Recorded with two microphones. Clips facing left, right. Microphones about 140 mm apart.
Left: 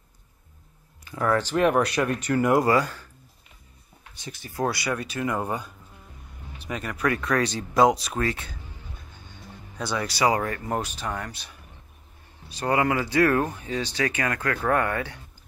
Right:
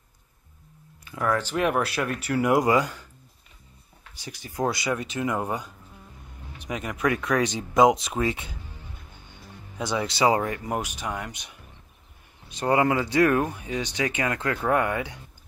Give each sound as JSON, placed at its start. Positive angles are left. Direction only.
{"t": 1.1, "sound": "speech", "side_deg": 0}
{"t": 4.2, "sound": "speech", "side_deg": -15}
{"t": 9.8, "sound": "speech", "side_deg": -20}